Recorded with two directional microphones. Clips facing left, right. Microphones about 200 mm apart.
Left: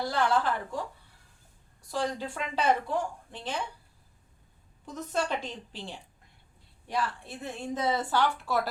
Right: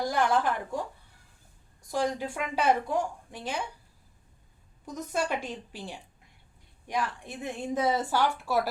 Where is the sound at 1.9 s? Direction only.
15° right (ahead or behind).